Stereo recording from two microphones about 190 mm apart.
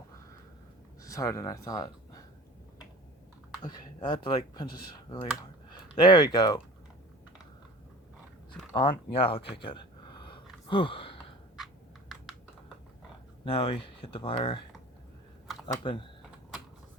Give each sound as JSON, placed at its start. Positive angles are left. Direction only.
{"t": 1.0, "sound": "speech", "side_deg": 15}
{"t": 3.6, "sound": "speech", "side_deg": 20}
{"t": 8.7, "sound": "speech", "side_deg": 25}
{"t": 9.1, "sound": "a sound", "side_deg": 30}
{"t": 11.5, "sound": "typing", "side_deg": 0}
{"t": 13.4, "sound": "speech", "side_deg": 25}
{"t": 15.6, "sound": "speech", "side_deg": 25}